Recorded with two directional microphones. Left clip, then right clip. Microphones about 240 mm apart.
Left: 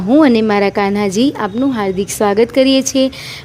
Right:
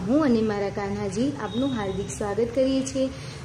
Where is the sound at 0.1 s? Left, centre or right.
Left.